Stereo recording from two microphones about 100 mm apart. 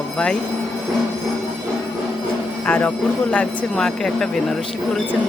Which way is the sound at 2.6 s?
15° left (ahead or behind).